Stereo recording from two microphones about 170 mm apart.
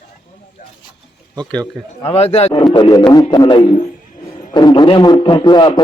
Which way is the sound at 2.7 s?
25° left (ahead or behind).